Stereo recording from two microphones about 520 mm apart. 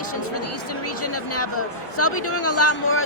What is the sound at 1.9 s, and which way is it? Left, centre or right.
Speech, left.